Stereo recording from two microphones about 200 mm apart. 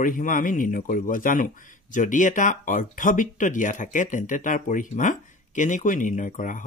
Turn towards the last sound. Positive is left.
turn(degrees=40)  # may be behind; listen again after turning